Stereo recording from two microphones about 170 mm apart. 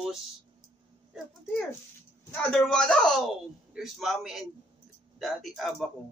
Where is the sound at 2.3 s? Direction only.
5° left (ahead or behind).